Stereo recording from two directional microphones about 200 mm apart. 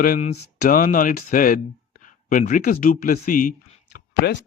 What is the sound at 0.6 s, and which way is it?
Speech, 45° left (ahead or behind).